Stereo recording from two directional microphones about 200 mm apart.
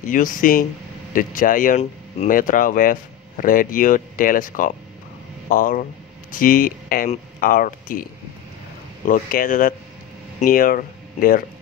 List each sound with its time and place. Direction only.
0.1 s speech: 40° left (ahead or behind)